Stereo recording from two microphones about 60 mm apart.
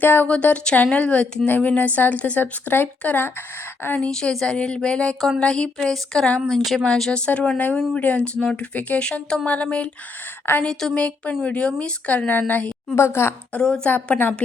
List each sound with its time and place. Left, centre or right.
0.0 s speech: left
0.3 s speech: left
4.1 s speech: centre
6.5 s speech: centre
7.2 s speech: left
10.6 s speech: centre; by 12.7 s left
13.0 s speech: left
13.5 s speech: centre
13.9 s speech: left